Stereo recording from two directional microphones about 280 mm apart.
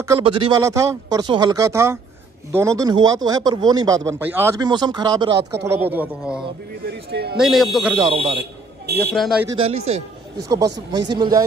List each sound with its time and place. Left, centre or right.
0.0 s a man's voice: centre
5.4 s speech: right
5.7 s a man's voice: centre
6.9 s speech: right
7.3 s speech: centre
8.1 s speech: centre
9.1 s speech: centre
9.8 s a man's voice: centre